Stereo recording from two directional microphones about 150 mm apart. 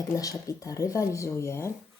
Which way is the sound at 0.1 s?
20° left (ahead or behind).